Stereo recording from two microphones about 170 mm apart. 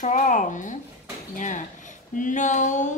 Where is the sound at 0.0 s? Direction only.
50° left (ahead or behind).